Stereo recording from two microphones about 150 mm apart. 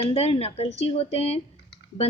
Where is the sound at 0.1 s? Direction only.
40° left (ahead or behind).